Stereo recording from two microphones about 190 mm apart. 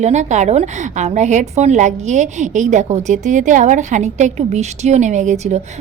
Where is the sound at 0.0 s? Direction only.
40° right (ahead or behind).